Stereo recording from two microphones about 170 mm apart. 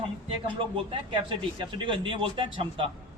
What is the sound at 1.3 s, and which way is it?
A man's voice, 30° right (ahead or behind).